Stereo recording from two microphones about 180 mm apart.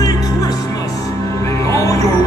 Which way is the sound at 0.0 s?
20° left (ahead or behind).